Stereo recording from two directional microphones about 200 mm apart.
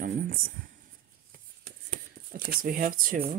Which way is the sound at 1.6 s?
50° right (ahead or behind).